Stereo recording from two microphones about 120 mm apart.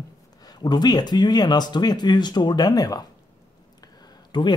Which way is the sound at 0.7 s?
35° left (ahead or behind).